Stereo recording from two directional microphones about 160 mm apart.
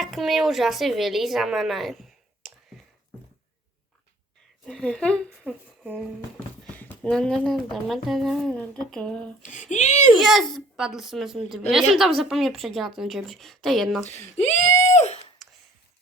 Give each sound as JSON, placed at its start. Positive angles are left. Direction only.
{"t": 0.0, "sound": "a woman's voice", "side_deg": 0}
{"t": 4.6, "sound": "speech", "side_deg": 5}
{"t": 9.5, "sound": "speech", "side_deg": 50}
{"t": 10.2, "sound": "speech", "side_deg": 0}
{"t": 14.0, "sound": "speech", "side_deg": 45}